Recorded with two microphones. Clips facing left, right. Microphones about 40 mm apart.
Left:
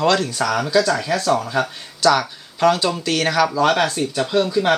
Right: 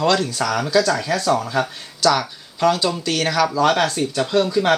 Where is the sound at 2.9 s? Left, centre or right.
Centre.